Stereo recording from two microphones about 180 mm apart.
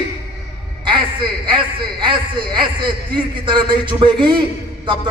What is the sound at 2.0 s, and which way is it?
Speech, 25° right (ahead or behind).